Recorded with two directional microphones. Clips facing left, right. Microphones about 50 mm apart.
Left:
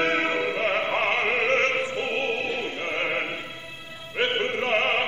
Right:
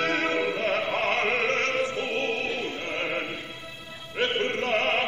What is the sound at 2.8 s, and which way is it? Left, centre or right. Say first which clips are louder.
Music: left 3 dB; left.